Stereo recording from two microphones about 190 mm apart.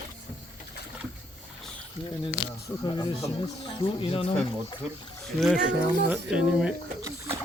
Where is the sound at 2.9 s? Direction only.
20° left (ahead or behind).